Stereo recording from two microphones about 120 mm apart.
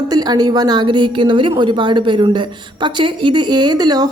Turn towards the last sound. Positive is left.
turn(degrees=-35)  # may be behind; listen again after turning